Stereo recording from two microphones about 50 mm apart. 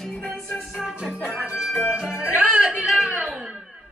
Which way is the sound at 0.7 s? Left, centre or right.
Centre.